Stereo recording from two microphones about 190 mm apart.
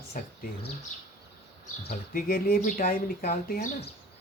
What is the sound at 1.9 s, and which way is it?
Speech, 50° left (ahead or behind).